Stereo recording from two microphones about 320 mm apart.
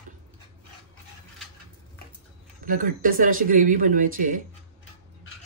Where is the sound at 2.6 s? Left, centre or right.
Right.